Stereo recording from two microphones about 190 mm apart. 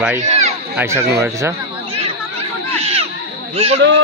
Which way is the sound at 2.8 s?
30° right (ahead or behind).